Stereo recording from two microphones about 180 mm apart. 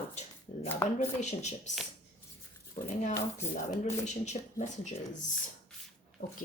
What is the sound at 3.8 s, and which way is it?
Speech, 40° left (ahead or behind).